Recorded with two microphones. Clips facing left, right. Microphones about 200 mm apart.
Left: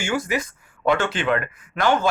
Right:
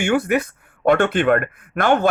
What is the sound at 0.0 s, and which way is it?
Speech, 60° right (ahead or behind).